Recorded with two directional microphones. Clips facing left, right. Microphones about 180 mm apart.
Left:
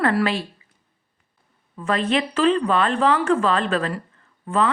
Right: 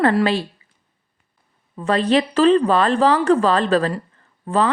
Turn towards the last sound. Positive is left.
turn(degrees=-35)  # may be behind; listen again after turning